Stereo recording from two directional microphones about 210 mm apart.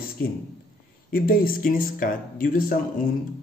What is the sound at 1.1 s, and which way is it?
Speech, 45° left (ahead or behind).